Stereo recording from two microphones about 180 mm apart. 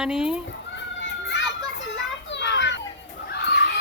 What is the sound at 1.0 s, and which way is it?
Children playing, 80° left.